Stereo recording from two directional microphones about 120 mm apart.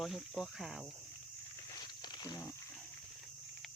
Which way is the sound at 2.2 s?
30° left (ahead or behind).